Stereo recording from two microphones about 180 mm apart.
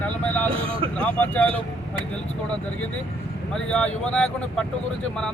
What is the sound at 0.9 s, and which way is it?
Speech, 5° left (ahead or behind).